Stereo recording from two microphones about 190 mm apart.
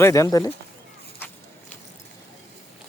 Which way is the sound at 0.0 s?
15° left (ahead or behind).